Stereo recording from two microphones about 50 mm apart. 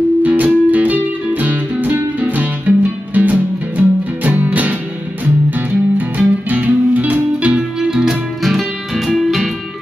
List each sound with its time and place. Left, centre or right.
0.2 s music: right
5.9 s music: right
7.9 s music: centre